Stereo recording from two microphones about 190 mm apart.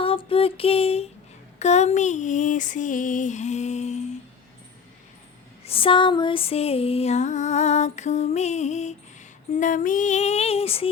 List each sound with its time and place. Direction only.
0.0 s a sound: 30° left (ahead or behind)
1.5 s music: 35° left (ahead or behind)
5.6 s music: 30° left (ahead or behind)